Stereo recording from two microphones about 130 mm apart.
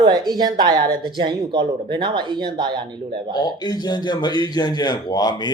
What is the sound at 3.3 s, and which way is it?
A man's voice, 30° left (ahead or behind).